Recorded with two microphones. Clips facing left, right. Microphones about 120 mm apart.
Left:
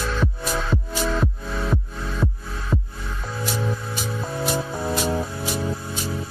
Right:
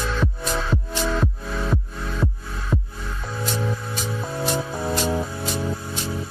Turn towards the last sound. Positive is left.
turn(degrees=0)  # may be behind; listen again after turning